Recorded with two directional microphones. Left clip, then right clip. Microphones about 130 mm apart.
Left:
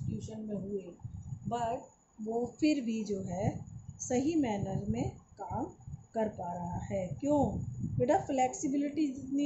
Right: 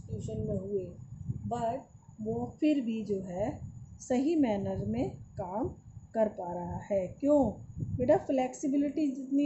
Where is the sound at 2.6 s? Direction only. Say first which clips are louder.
Right 4 dB; 25° right (ahead or behind).